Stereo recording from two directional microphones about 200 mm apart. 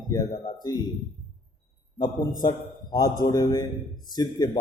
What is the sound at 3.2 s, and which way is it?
A man's voice, 20° left (ahead or behind).